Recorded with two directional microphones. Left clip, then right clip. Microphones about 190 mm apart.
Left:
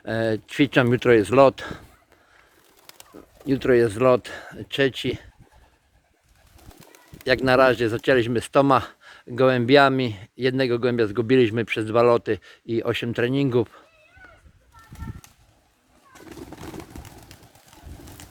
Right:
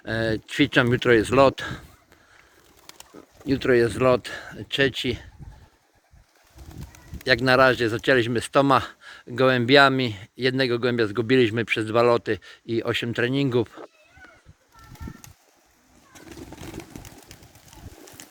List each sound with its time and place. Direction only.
0.0 s speech: 10° left (ahead or behind)
3.4 s speech: 5° left (ahead or behind)
7.3 s speech: 5° left (ahead or behind)
16.1 s vehicle: 35° right (ahead or behind)